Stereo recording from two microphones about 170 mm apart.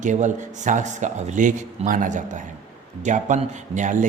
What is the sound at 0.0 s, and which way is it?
A man's voice, 45° right (ahead or behind).